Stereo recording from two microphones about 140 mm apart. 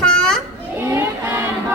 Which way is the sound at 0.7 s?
15° right (ahead or behind).